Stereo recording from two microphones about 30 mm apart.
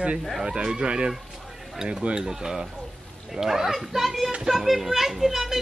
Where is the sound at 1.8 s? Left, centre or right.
Right.